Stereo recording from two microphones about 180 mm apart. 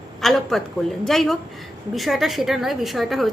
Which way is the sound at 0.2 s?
Centre (ahead or behind).